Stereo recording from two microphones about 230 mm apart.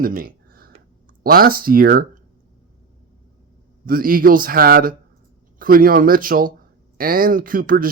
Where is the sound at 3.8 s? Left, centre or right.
Right.